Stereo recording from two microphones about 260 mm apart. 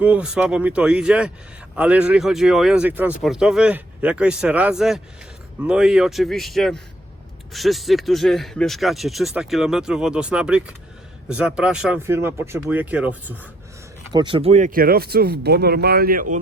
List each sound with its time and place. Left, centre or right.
0.0 s speech: centre
14.1 s speech: centre; by 16.2 s right